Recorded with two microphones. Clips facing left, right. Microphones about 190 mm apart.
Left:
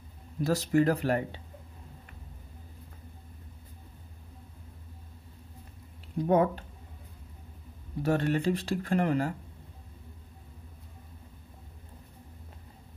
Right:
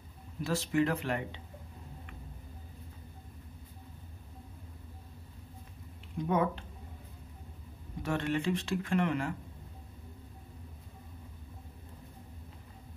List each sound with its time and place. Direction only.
0.4 s speech: 40° left (ahead or behind)
6.1 s speech: 40° left (ahead or behind)
8.0 s speech: 40° left (ahead or behind)